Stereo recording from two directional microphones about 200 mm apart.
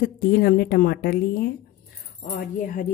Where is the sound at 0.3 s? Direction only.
50° left (ahead or behind).